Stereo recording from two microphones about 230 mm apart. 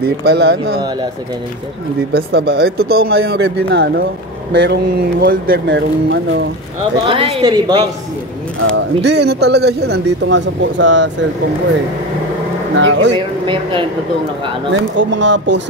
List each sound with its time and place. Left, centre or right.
0.0 s speech: right
2.1 s speech: right
7.1 s a woman's voice: right
8.6 s speech: right
12.7 s speech: right
13.5 s a woman's voice: right
14.7 s speech: right